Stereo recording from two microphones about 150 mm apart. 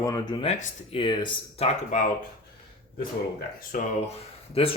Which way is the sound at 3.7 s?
65° left (ahead or behind).